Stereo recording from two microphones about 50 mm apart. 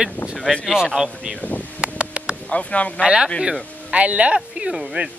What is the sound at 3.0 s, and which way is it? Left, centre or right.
Speech, centre.